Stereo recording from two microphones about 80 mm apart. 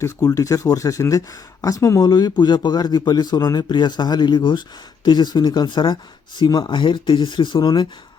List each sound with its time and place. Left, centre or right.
0.2 s a man's voice: left